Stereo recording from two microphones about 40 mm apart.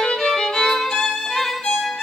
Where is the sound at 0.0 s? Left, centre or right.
Centre.